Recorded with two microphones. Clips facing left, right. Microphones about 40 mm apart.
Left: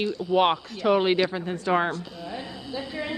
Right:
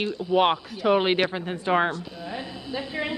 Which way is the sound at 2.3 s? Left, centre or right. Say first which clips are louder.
Right 2 dB; right.